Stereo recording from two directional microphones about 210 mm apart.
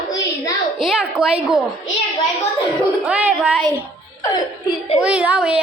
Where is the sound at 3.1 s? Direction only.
5° right (ahead or behind).